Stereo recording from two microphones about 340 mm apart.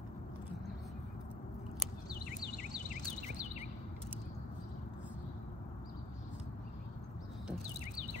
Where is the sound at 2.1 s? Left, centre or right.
Left.